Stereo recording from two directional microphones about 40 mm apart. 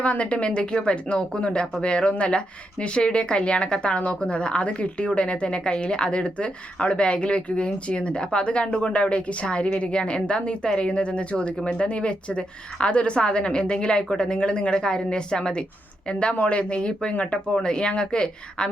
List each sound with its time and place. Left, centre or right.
0.0 s a woman's voice: left